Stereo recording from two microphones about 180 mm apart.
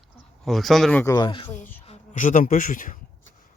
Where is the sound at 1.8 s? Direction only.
45° left (ahead or behind).